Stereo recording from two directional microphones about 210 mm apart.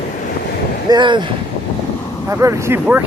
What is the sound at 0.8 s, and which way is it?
Speech, 20° right (ahead or behind).